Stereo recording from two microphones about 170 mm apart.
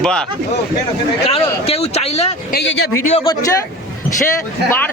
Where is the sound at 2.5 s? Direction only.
90° left.